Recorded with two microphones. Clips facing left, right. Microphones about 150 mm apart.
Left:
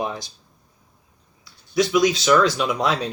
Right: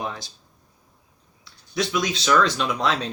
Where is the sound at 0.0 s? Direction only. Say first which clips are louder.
Left 4 dB; 15° left (ahead or behind).